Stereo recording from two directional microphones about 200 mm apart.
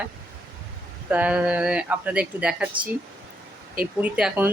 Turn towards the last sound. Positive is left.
turn(degrees=-5)  # may be behind; listen again after turning